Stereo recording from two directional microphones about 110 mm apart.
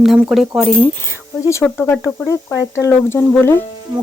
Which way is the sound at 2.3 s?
30° left (ahead or behind).